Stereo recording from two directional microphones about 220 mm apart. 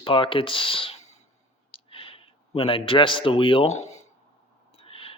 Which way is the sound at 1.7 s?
25° left (ahead or behind).